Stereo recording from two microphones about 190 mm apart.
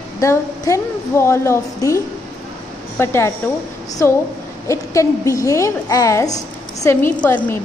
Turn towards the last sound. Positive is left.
turn(degrees=10)  # may be behind; listen again after turning